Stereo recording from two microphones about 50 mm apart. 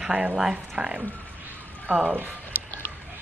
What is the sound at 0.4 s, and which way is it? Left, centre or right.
Speech, centre.